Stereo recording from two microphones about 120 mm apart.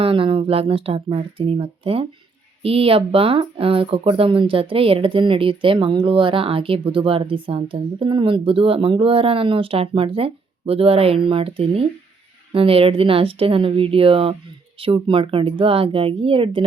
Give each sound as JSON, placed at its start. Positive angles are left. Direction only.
{"t": 0.0, "sound": "speech", "side_deg": -45}